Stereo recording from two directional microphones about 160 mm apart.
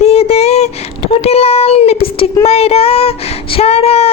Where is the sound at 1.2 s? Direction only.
40° left (ahead or behind).